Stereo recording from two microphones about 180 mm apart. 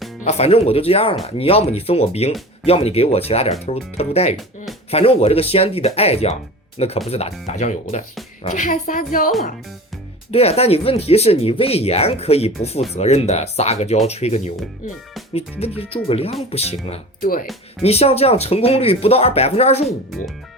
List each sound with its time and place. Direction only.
0.2 s a woman's voice: 35° left (ahead or behind)
10.3 s speech: 35° left (ahead or behind)
17.2 s speech: 50° left (ahead or behind)
17.8 s speech: 35° left (ahead or behind)